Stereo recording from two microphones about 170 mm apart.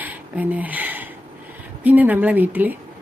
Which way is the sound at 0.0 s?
10° right (ahead or behind).